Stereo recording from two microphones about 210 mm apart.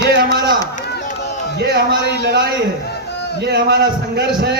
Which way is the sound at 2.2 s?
50° right (ahead or behind).